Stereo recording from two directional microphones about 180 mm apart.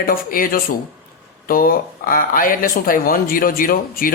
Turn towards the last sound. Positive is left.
turn(degrees=50)  # may be behind; listen again after turning